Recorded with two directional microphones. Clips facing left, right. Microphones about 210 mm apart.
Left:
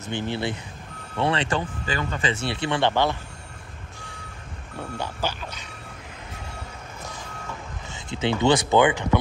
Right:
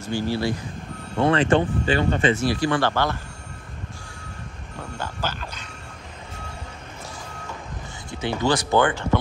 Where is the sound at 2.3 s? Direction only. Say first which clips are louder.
Right 5 dB; 25° left (ahead or behind).